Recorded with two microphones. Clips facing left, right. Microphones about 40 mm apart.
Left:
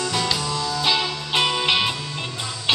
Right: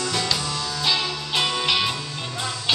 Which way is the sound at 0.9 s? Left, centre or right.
Centre.